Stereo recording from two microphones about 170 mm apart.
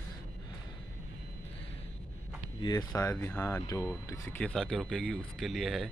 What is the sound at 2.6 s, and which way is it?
Speech, 20° left (ahead or behind).